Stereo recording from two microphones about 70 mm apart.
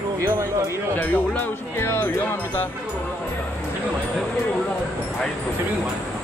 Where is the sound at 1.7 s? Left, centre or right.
Left.